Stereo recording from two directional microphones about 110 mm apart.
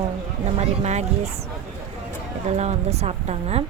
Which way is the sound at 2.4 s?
90° right.